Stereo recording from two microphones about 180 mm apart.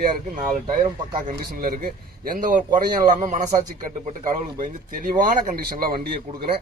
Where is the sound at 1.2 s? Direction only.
55° right (ahead or behind).